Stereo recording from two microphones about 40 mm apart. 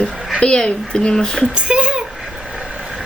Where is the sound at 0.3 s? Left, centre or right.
Left.